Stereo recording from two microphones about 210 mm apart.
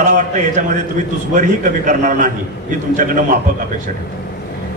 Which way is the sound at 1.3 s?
35° right (ahead or behind).